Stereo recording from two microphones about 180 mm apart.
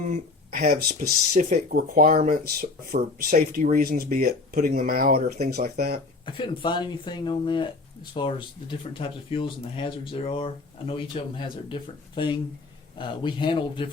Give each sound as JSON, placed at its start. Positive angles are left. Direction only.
{"t": 0.1, "sound": "speech", "side_deg": -50}
{"t": 5.5, "sound": "speech", "side_deg": -40}
{"t": 6.2, "sound": "speech", "side_deg": 30}